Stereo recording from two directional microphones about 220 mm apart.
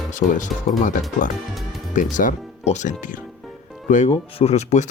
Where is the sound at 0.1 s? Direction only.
35° left (ahead or behind).